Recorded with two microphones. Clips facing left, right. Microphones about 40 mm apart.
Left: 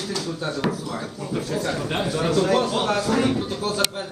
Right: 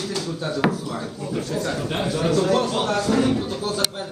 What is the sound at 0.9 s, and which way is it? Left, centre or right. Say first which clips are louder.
Speech: right 1 dB; centre.